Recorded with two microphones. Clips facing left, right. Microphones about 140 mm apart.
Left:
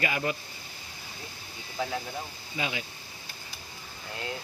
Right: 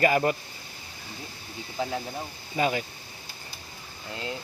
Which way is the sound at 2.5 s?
45° right (ahead or behind).